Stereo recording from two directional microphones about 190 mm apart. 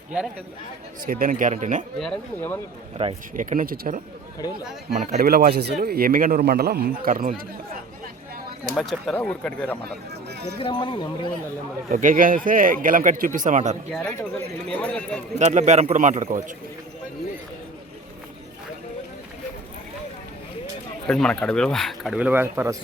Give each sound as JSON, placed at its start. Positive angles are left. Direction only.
{"t": 1.0, "sound": "speech", "side_deg": -50}
{"t": 2.0, "sound": "speech", "side_deg": 5}
{"t": 3.0, "sound": "a man's voice", "side_deg": -30}
{"t": 3.3, "sound": "speech", "side_deg": -45}
{"t": 8.7, "sound": "speech", "side_deg": 0}
{"t": 9.8, "sound": "a sound", "side_deg": -60}
{"t": 10.6, "sound": "speech", "side_deg": 25}
{"t": 11.9, "sound": "speech", "side_deg": -45}
{"t": 14.7, "sound": "speech", "side_deg": 5}
{"t": 15.4, "sound": "a man's voice", "side_deg": -40}
{"t": 21.1, "sound": "speech", "side_deg": 5}